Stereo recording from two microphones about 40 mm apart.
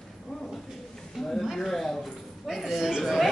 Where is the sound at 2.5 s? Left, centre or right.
Centre.